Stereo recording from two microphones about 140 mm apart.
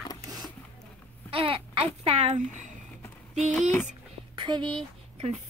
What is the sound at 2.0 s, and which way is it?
Speech, 45° right (ahead or behind).